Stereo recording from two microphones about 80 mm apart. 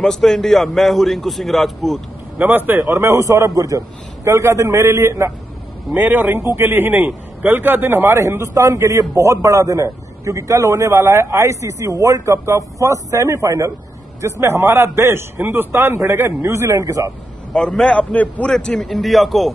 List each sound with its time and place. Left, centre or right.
0.0 s a man's voice: centre
2.3 s a man's voice: right
2.8 s a man's voice: right
5.9 s a man's voice: right
17.5 s a man's voice: centre
18.5 s a man's voice: centre